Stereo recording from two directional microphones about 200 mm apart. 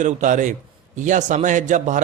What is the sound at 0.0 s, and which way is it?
Speech, 40° right (ahead or behind).